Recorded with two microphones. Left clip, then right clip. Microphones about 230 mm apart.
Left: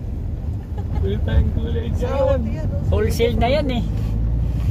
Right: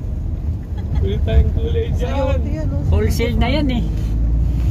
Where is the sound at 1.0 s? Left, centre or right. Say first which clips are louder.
Right 3 dB; right.